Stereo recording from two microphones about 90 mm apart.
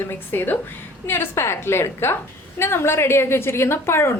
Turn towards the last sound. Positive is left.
turn(degrees=30)  # may be behind; listen again after turning